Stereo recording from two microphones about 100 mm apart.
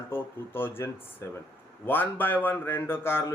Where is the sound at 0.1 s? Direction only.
20° left (ahead or behind).